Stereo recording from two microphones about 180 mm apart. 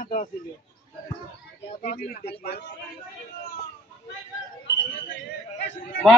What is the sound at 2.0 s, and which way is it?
Speech, 55° left (ahead or behind).